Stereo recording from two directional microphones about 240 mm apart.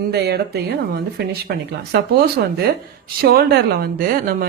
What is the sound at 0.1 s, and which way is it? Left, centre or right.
Speech, right.